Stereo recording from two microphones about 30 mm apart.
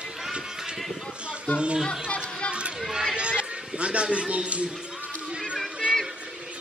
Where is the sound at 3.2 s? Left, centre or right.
Right.